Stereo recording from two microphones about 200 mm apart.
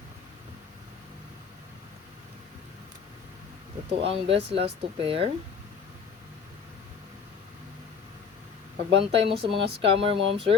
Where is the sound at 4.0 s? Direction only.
30° right (ahead or behind).